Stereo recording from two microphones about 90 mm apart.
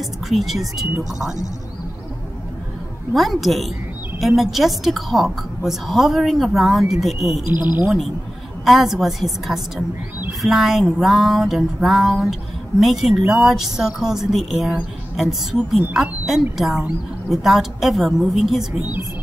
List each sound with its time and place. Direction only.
0.3 s a woman's voice: centre (ahead or behind)
3.1 s a woman's voice: centre (ahead or behind)
7.5 s speech: 20° right (ahead or behind)
8.6 s a woman's voice: 5° right (ahead or behind)